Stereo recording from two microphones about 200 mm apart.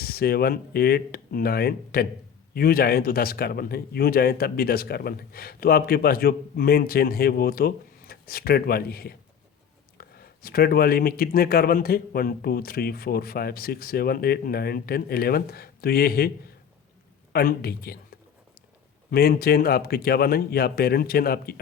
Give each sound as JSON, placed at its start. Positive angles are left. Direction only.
{"t": 0.0, "sound": "speech", "side_deg": 50}
{"t": 17.3, "sound": "speech", "side_deg": 50}
{"t": 19.1, "sound": "speech", "side_deg": 50}